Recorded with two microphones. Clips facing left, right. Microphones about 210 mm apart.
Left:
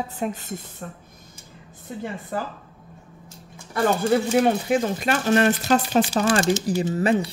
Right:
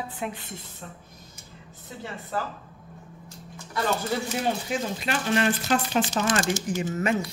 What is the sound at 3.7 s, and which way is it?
A woman's voice, 50° left (ahead or behind).